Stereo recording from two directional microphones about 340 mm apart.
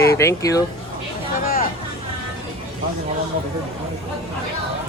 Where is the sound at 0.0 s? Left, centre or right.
Centre.